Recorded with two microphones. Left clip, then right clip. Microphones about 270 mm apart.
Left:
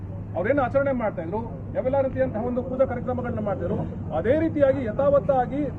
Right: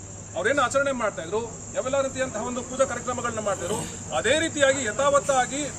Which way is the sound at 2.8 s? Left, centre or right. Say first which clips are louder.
Right 1 dB; centre.